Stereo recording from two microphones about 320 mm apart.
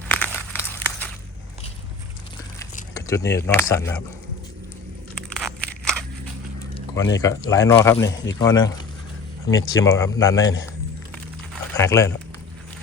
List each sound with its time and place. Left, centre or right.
0.1 s crumpling: centre
2.9 s speech: centre
5.3 s a sound: centre
7.2 s speech: centre
11.8 s speech: centre